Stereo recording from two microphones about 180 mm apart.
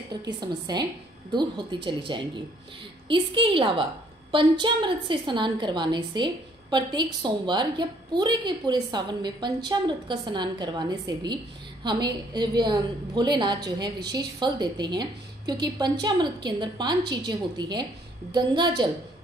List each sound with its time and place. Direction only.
0.1 s a woman's voice: 25° right (ahead or behind)